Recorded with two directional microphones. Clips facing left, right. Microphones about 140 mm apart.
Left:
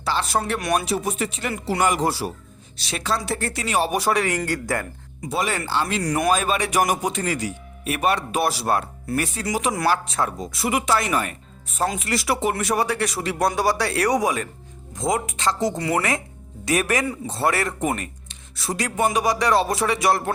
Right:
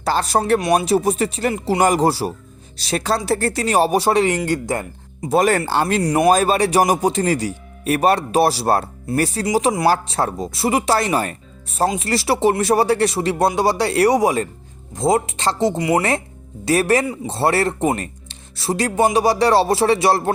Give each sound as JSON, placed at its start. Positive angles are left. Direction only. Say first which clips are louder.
{"t": 0.0, "sound": "a man's voice", "louder": "right 5 dB", "side_deg": -40}
{"t": 5.3, "sound": "speech", "louder": "right 8 dB", "side_deg": -45}
{"t": 6.0, "sound": "speech", "louder": "right 7 dB", "side_deg": -25}
{"t": 6.3, "sound": "speech", "louder": "right 6 dB", "side_deg": -35}